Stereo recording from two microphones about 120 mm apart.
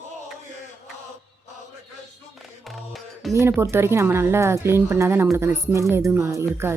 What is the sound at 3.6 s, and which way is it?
Speech, 20° right (ahead or behind).